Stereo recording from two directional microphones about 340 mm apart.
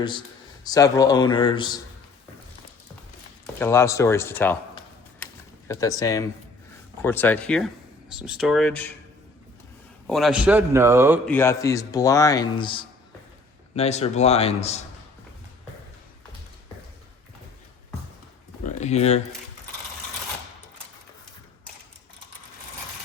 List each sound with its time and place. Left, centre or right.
0.0 s a man's voice: centre
3.6 s a man's voice: centre
5.2 s a sound: centre
7.0 s a man's voice: centre
10.1 s a man's voice: centre
11.3 s a man's voice: centre
18.6 s a sound: left